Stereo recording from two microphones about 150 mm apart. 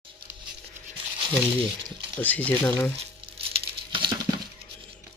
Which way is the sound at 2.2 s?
10° left (ahead or behind).